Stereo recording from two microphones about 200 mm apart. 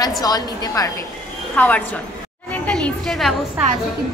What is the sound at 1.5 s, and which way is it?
A woman's voice, 5° left (ahead or behind).